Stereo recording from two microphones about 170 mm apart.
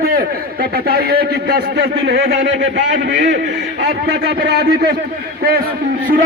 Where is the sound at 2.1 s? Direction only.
85° right.